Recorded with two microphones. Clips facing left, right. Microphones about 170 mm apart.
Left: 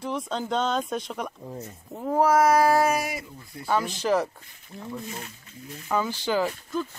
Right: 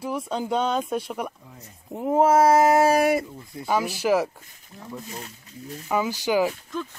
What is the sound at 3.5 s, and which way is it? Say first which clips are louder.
Speech: right 1 dB; 15° right (ahead or behind).